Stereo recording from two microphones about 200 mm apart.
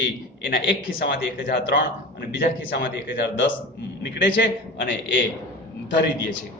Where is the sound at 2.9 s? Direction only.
65° left (ahead or behind).